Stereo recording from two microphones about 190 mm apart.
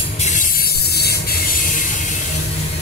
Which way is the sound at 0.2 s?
40° left (ahead or behind).